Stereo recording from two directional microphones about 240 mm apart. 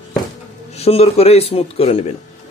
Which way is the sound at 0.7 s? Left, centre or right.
Left.